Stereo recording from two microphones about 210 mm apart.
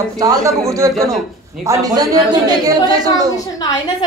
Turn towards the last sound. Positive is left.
turn(degrees=-20)  # may be behind; listen again after turning